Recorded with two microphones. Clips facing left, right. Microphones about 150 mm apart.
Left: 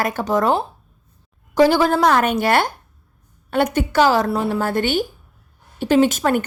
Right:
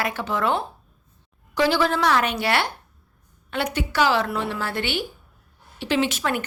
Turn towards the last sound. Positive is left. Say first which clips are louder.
# left 7 dB
turn(degrees=45)  # may be behind; listen again after turning